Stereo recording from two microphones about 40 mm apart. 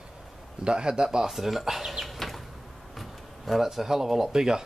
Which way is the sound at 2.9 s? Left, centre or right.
Centre.